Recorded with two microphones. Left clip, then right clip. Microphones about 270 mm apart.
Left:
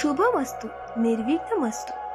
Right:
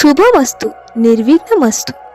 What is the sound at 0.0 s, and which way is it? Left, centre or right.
A woman's voice, right.